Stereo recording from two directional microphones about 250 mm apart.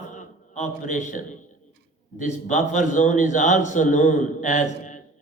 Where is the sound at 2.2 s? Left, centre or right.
Left.